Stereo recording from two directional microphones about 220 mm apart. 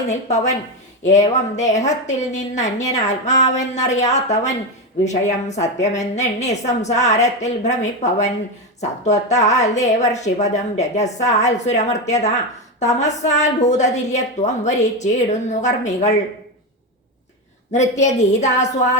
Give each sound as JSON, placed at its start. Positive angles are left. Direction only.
{"t": 0.1, "sound": "a woman's voice", "side_deg": 30}
{"t": 17.7, "sound": "a woman's voice", "side_deg": 30}